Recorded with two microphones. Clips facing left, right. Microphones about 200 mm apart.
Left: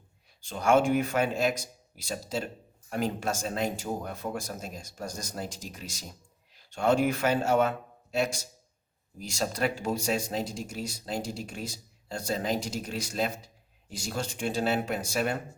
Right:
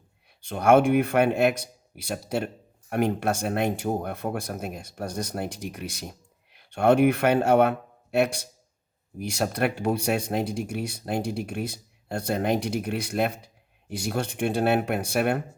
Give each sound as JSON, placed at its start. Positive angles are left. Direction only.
{"t": 0.4, "sound": "speech", "side_deg": -60}